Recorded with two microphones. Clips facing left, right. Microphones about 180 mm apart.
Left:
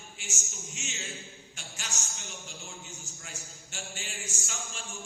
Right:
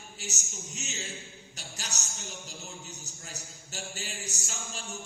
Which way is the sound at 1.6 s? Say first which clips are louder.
Right 1 dB; 40° right (ahead or behind).